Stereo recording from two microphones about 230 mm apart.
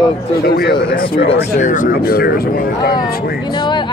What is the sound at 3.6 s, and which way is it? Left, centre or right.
Speech, centre.